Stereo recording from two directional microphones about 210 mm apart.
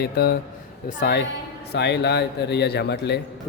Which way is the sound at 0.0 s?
50° left (ahead or behind).